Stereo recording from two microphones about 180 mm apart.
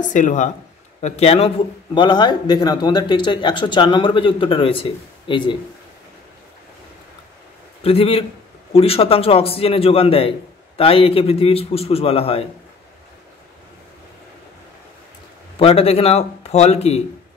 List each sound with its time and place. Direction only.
0.0 s a man's voice: 45° left (ahead or behind); by 5.6 s 25° left (ahead or behind)
7.8 s a man's voice: 35° left (ahead or behind)
15.6 s a man's voice: 35° left (ahead or behind)